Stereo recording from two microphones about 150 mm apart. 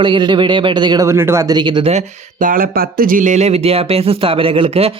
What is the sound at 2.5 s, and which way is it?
Speech, 80° right.